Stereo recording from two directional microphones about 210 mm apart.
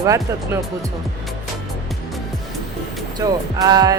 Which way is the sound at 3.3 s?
20° right (ahead or behind).